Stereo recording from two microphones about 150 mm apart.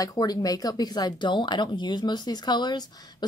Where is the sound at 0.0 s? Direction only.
25° left (ahead or behind).